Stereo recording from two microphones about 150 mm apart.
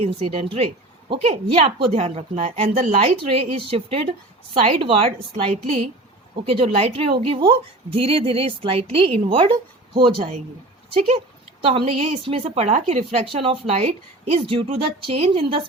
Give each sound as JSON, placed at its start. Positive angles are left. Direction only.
{"t": 0.0, "sound": "a woman's voice", "side_deg": -45}